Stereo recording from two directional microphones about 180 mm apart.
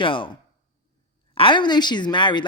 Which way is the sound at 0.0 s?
30° left (ahead or behind).